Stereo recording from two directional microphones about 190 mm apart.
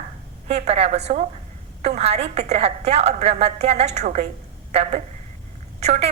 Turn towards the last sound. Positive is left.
turn(degrees=-35)  # may be behind; listen again after turning